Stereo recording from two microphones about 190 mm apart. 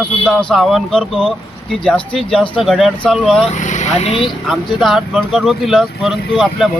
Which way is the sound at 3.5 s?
40° left (ahead or behind).